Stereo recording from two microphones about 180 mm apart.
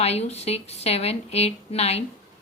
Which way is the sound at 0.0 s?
35° left (ahead or behind).